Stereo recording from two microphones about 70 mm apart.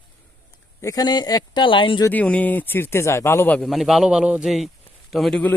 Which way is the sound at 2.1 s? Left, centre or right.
Left.